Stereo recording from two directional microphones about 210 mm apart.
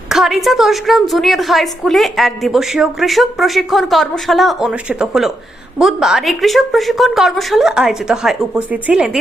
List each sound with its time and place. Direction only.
0.1 s a woman's voice: centre (ahead or behind)